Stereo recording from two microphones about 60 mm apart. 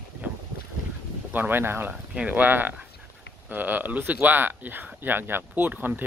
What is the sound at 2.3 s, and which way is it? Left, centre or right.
Speech, right.